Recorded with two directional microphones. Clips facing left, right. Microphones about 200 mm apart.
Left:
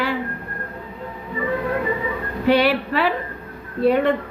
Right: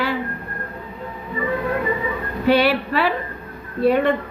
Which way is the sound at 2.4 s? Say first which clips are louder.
Even; 20° left (ahead or behind).